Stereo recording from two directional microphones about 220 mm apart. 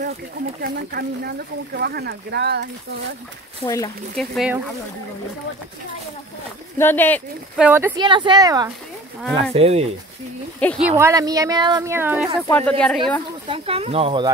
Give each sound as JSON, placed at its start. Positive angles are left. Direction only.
{"t": 0.6, "sound": "speech", "side_deg": -45}
{"t": 3.6, "sound": "speech", "side_deg": 15}
{"t": 4.2, "sound": "speech", "side_deg": 0}
{"t": 6.8, "sound": "speech", "side_deg": 10}
{"t": 7.5, "sound": "a woman's voice", "side_deg": -10}
{"t": 7.9, "sound": "speech", "side_deg": -20}
{"t": 10.6, "sound": "speech", "side_deg": 5}
{"t": 11.0, "sound": "a woman's voice", "side_deg": -15}
{"t": 12.4, "sound": "speech", "side_deg": 5}
{"t": 13.5, "sound": "speech", "side_deg": -25}